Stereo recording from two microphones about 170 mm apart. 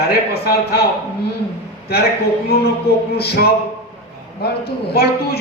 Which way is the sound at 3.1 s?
70° left (ahead or behind).